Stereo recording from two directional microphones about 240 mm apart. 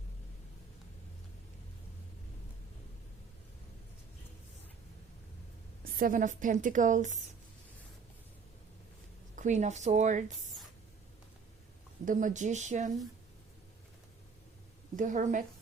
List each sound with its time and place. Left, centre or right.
6.0 s a woman's voice: right
9.3 s speech: right
12.0 s a woman's voice: right
14.9 s a woman's voice: right